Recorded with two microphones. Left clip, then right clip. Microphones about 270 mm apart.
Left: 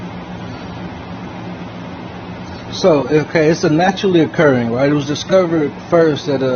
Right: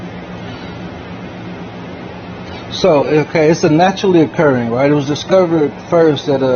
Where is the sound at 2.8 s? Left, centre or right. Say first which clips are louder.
Right 2 dB; centre.